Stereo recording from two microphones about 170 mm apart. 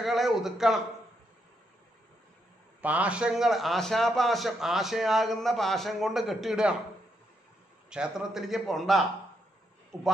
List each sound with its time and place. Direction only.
0.0 s speech: centre (ahead or behind)
2.8 s a man's voice: 10° right (ahead or behind)
7.9 s a man's voice: 5° right (ahead or behind)